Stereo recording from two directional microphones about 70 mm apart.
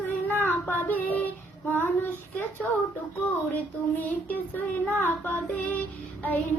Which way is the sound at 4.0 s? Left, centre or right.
Left.